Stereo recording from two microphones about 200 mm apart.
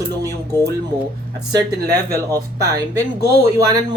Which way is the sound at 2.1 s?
15° right (ahead or behind).